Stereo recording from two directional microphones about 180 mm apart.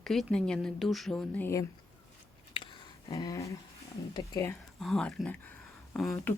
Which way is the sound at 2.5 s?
25° left (ahead or behind).